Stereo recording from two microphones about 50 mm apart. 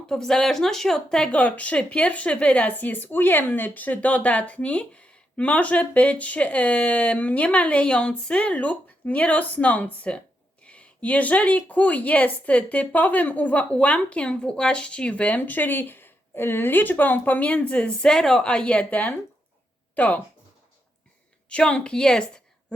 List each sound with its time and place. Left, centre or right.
0.1 s a woman's voice: centre
1.3 s a woman's voice: left
21.5 s a woman's voice: left